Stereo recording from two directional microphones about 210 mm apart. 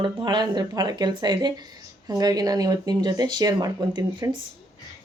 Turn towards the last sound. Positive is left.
turn(degrees=-20)  # may be behind; listen again after turning